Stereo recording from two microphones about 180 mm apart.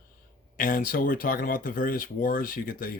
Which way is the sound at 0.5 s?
50° left (ahead or behind).